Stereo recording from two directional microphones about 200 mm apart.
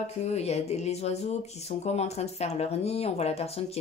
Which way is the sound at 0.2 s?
30° left (ahead or behind).